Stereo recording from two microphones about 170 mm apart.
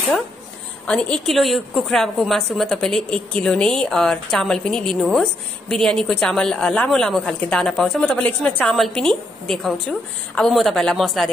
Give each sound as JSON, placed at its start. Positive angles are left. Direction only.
{"t": 0.8, "sound": "a woman's voice", "side_deg": 5}